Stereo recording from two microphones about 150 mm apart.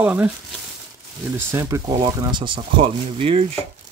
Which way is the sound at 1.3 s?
20° right (ahead or behind).